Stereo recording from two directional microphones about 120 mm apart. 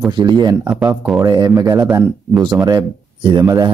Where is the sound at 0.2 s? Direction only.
35° right (ahead or behind).